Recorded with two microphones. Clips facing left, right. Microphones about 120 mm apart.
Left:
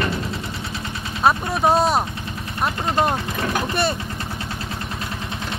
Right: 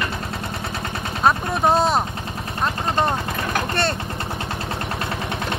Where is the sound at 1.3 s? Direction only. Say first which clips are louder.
Left 1 dB; centre (ahead or behind).